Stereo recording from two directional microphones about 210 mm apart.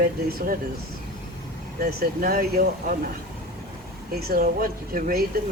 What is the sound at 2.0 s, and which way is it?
Speech, 45° right (ahead or behind).